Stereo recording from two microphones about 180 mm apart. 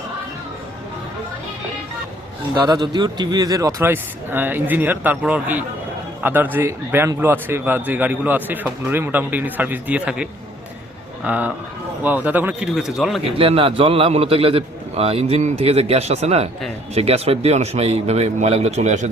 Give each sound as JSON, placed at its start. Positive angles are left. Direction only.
{"t": 2.6, "sound": "a man's voice", "side_deg": -25}
{"t": 13.4, "sound": "a man's voice", "side_deg": -30}